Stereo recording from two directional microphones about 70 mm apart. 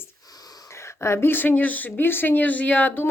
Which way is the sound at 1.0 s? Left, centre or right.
Left.